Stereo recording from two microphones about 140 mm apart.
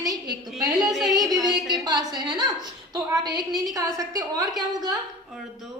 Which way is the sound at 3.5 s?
25° right (ahead or behind).